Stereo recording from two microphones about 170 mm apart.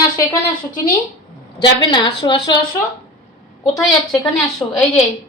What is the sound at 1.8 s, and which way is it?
Speech, 25° left (ahead or behind).